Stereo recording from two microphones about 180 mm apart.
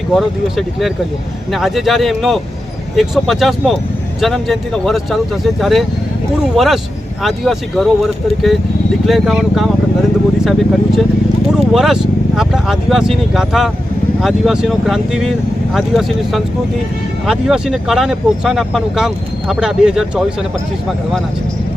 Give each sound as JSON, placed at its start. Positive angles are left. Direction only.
{"t": 0.1, "sound": "speech", "side_deg": 0}